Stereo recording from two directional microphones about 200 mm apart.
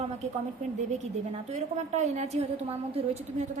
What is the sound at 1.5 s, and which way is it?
A woman's voice, 35° right (ahead or behind).